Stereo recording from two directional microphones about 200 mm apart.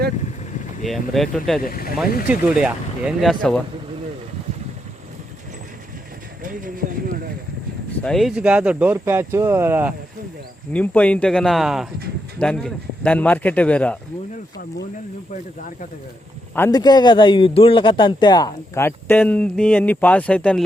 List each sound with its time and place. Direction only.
0.9 s speech: centre (ahead or behind)
1.6 s speech: 45° left (ahead or behind)
2.2 s speech: 5° right (ahead or behind)
6.4 s speech: 45° right (ahead or behind)
8.0 s speech: centre (ahead or behind)
10.7 s a man's voice: 5° left (ahead or behind)
16.6 s a man's voice: 15° left (ahead or behind)